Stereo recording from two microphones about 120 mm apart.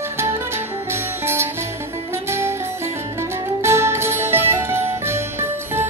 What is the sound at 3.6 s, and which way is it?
Music, 20° right (ahead or behind).